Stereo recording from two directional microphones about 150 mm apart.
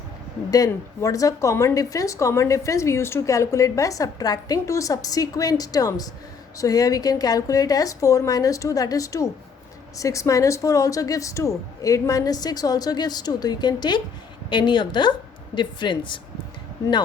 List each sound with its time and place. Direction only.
0.5 s a woman's voice: 25° left (ahead or behind)